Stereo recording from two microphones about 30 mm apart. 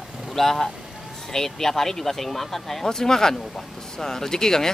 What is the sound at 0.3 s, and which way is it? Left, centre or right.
Speech, centre.